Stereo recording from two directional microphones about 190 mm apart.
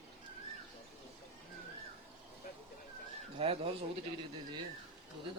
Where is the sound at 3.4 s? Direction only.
30° right (ahead or behind).